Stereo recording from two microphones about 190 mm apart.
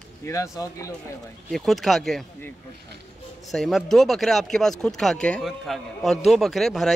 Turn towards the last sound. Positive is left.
turn(degrees=0)  # may be behind; listen again after turning